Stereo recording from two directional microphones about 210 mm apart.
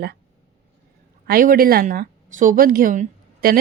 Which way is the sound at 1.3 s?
45° right (ahead or behind).